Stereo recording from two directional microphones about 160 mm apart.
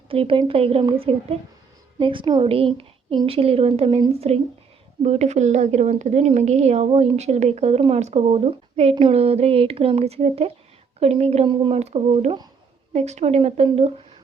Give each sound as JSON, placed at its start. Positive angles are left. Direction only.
{"t": 0.1, "sound": "a woman's voice", "side_deg": -35}